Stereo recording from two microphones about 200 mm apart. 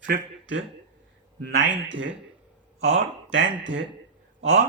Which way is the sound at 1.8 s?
65° right (ahead or behind).